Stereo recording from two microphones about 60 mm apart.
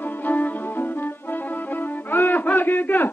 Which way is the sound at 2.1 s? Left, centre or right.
Left.